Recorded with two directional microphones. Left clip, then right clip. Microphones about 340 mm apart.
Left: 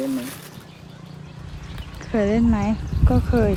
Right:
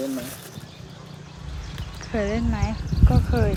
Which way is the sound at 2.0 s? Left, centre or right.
Centre.